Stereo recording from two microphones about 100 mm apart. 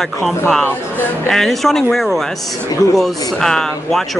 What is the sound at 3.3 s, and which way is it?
Speech, 5° left (ahead or behind).